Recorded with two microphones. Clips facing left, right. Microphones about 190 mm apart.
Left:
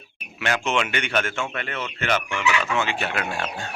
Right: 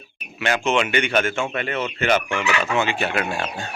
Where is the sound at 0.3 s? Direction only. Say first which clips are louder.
Right 3 dB; 5° right (ahead or behind).